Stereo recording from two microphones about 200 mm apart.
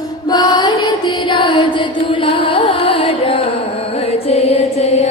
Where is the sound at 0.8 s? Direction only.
20° left (ahead or behind).